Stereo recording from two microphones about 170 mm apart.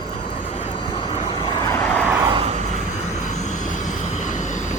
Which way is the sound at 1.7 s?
10° left (ahead or behind).